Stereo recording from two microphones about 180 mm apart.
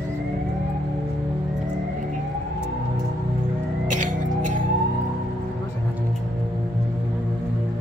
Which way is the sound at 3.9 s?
45° right (ahead or behind).